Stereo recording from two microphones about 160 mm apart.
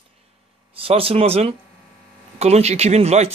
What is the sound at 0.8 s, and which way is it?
Speech, 35° right (ahead or behind).